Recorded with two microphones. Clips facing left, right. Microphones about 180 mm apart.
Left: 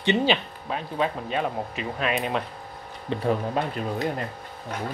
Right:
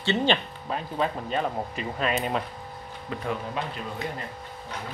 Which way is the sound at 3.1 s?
30° left (ahead or behind).